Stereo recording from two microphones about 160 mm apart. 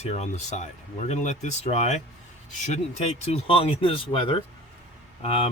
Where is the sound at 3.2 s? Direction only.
35° left (ahead or behind).